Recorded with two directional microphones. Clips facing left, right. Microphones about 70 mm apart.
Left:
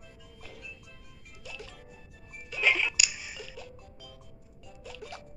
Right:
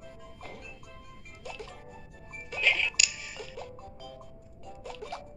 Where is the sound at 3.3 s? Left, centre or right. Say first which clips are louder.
Right 3 dB; right.